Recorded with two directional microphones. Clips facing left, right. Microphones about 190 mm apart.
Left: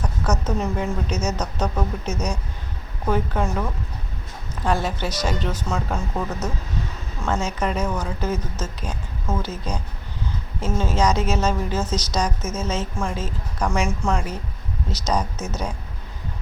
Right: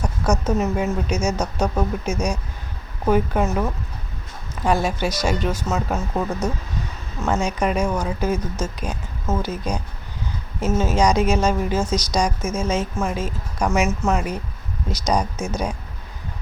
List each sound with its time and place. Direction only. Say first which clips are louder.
0.0 s a woman's voice: right 3 dB; 10° right (ahead or behind)
4.6 s a woman's voice: right 3 dB; 10° right (ahead or behind)
7.3 s a woman's voice: right 3 dB; 15° right (ahead or behind)